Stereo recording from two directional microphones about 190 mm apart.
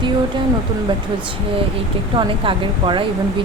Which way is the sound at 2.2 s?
25° right (ahead or behind).